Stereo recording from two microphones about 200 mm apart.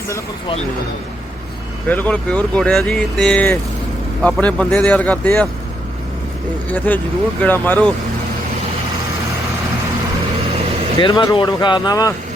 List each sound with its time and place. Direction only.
1.9 s speech: 5° left (ahead or behind)
6.7 s speech: 10° left (ahead or behind)
11.0 s speech: 20° left (ahead or behind)